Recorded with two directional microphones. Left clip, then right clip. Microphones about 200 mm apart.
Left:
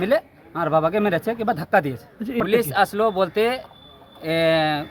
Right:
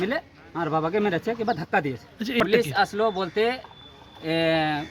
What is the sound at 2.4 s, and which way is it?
Speech, 20° left (ahead or behind).